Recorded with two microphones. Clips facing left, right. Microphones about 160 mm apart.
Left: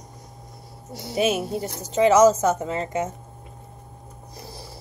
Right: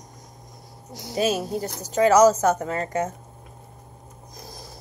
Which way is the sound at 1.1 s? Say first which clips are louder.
Left 1 dB; 25° left (ahead or behind).